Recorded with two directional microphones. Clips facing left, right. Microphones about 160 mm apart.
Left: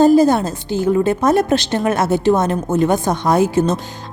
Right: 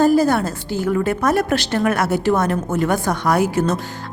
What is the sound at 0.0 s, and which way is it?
A woman's voice, 20° left (ahead or behind).